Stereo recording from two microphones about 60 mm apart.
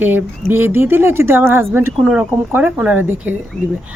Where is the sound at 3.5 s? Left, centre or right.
Centre.